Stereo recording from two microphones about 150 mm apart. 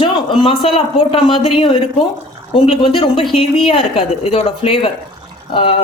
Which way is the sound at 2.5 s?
40° left (ahead or behind).